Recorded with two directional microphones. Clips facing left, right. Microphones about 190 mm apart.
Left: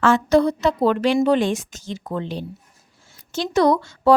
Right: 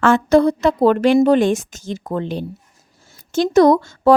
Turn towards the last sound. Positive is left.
turn(degrees=-45)  # may be behind; listen again after turning